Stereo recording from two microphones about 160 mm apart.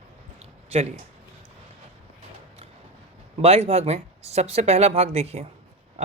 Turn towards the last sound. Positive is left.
turn(degrees=-40)  # may be behind; listen again after turning